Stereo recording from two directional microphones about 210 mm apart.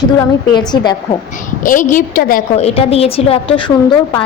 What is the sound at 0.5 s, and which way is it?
Speech, 20° left (ahead or behind).